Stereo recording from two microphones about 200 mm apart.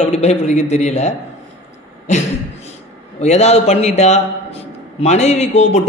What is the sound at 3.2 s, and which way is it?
A man's voice, 35° left (ahead or behind).